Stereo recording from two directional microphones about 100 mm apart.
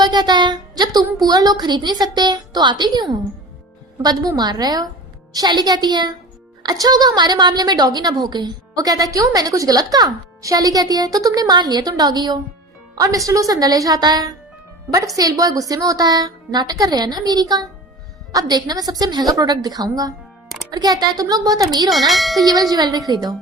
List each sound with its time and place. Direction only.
0.0 s a sound: 45° right (ahead or behind)
1.2 s a woman's voice: 40° right (ahead or behind)
21.8 s speech: centre (ahead or behind)
22.7 s a woman's voice: 40° right (ahead or behind)